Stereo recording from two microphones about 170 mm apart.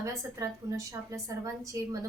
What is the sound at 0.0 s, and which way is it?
A woman's voice, 20° right (ahead or behind).